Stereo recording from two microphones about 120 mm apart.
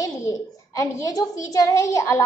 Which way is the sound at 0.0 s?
30° left (ahead or behind).